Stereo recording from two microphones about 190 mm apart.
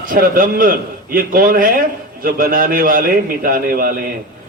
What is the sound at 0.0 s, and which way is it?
A man's voice, 45° right (ahead or behind).